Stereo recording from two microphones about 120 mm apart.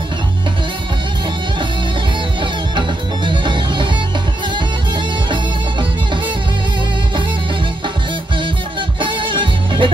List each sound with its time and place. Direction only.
3.3 s music: 40° right (ahead or behind)
5.3 s music: 40° right (ahead or behind)
9.0 s music: 45° right (ahead or behind)